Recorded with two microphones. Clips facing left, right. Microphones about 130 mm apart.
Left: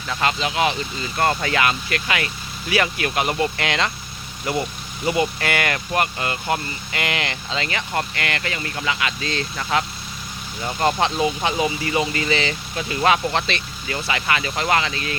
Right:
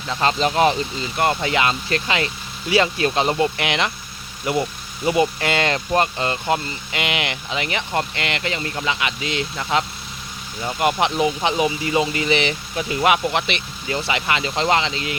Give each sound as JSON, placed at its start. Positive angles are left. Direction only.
{"t": 0.1, "sound": "speech", "side_deg": -30}
{"t": 0.9, "sound": "speech", "side_deg": -15}
{"t": 5.0, "sound": "speech", "side_deg": -20}